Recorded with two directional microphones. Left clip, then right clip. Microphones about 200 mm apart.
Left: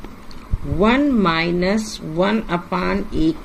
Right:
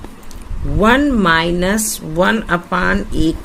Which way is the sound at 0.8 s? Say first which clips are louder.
Right 4 dB; 60° right (ahead or behind).